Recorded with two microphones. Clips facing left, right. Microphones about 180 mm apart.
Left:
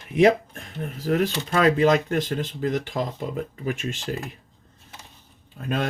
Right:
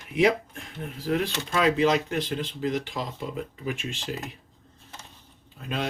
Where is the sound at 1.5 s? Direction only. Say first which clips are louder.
Left 3 dB; 50° left (ahead or behind).